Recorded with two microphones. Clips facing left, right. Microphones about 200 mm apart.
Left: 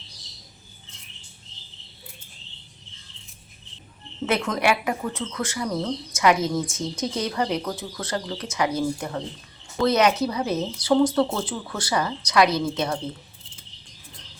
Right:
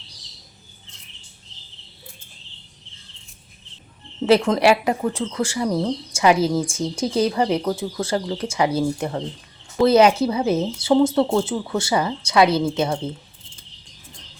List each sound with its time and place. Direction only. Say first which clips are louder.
4.3 s speech: right 7 dB; 30° right (ahead or behind)